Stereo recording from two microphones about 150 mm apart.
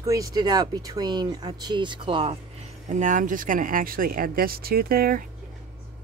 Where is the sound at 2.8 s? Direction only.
55° right (ahead or behind); by 5.2 s 75° right (ahead or behind).